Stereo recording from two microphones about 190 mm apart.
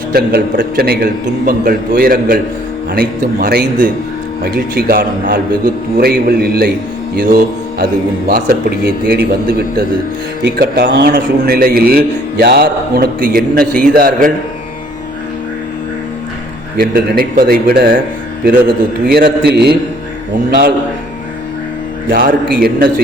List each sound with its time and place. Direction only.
0.1 s a man's voice: 55° right (ahead or behind)
16.7 s a man's voice: 50° right (ahead or behind)
22.1 s a man's voice: 50° right (ahead or behind)